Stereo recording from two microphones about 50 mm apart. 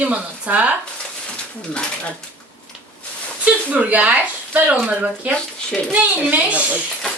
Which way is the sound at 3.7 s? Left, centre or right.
Right.